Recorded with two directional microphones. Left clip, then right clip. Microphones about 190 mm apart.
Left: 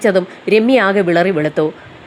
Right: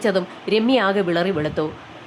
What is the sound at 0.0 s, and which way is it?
A woman's voice, 15° left (ahead or behind).